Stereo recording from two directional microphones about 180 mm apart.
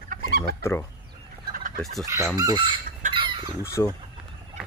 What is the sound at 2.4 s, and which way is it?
Chicken, 20° right (ahead or behind).